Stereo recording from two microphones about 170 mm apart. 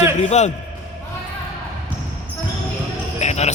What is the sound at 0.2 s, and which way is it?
Speech, 40° left (ahead or behind).